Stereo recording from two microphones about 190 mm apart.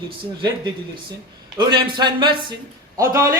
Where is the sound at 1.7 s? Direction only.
25° right (ahead or behind).